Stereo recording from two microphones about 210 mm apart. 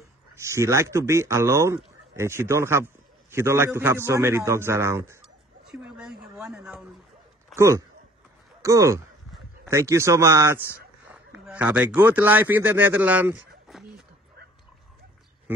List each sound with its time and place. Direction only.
0.4 s a man's voice: 15° right (ahead or behind)
5.7 s a sound: 5° right (ahead or behind)
7.5 s a man's voice: 15° right (ahead or behind)
13.7 s dog: centre (ahead or behind)